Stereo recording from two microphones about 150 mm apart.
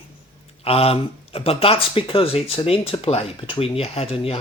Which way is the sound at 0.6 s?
40° left (ahead or behind).